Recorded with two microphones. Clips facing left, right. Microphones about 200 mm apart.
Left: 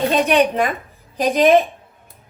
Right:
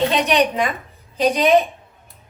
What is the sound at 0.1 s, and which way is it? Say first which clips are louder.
Speech: left 2 dB; 50° left (ahead or behind).